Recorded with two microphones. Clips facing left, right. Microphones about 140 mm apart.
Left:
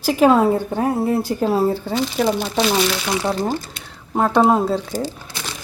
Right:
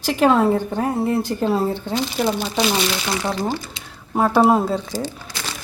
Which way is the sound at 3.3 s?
35° left (ahead or behind).